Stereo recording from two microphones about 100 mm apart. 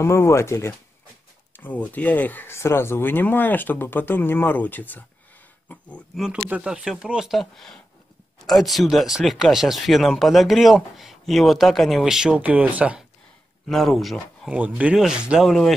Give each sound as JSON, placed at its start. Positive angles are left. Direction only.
{"t": 0.0, "sound": "speech", "side_deg": 30}
{"t": 1.5, "sound": "speech", "side_deg": 15}
{"t": 6.1, "sound": "speech", "side_deg": -5}
{"t": 13.7, "sound": "speech", "side_deg": 0}
{"t": 14.5, "sound": "speech", "side_deg": -10}
{"t": 15.4, "sound": "speech", "side_deg": 5}